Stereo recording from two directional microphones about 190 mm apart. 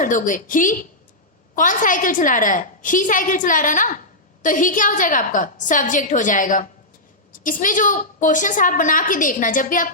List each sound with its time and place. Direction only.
0.0 s a woman's voice: 45° left (ahead or behind)